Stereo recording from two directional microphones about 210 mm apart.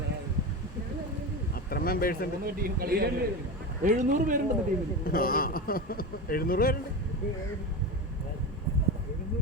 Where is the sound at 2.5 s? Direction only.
45° right (ahead or behind).